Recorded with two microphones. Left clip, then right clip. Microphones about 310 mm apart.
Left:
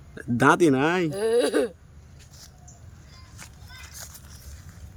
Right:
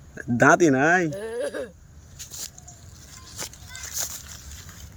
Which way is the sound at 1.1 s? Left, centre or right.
Left.